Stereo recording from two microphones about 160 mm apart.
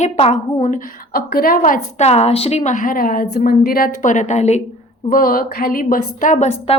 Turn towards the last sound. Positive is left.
turn(degrees=50)  # may be behind; listen again after turning